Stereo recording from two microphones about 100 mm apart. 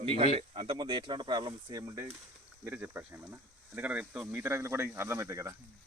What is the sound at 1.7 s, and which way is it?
Speech, 30° right (ahead or behind).